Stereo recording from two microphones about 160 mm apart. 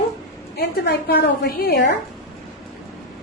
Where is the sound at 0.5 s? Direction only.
80° left.